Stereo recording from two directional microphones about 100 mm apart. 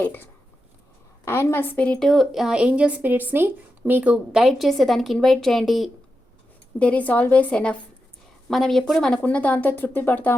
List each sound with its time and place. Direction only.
0.0 s a woman's voice: 20° left (ahead or behind); by 5.9 s centre (ahead or behind)
6.7 s speech: 15° left (ahead or behind)